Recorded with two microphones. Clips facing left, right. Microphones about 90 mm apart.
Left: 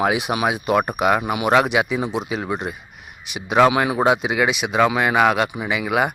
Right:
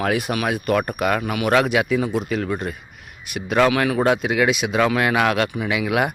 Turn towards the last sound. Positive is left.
turn(degrees=5)  # may be behind; listen again after turning